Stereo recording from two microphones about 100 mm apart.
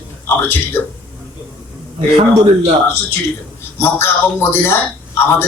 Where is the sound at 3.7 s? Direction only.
25° left (ahead or behind).